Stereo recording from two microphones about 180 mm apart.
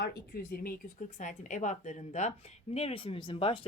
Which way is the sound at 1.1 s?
45° left (ahead or behind).